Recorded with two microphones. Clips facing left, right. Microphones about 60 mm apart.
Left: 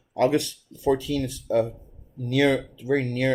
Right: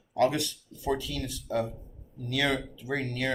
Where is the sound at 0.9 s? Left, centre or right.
Left.